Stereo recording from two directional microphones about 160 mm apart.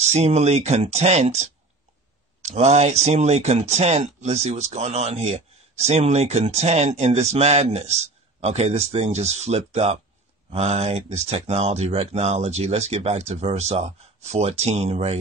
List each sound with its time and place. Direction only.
0.1 s speech: 45° right (ahead or behind)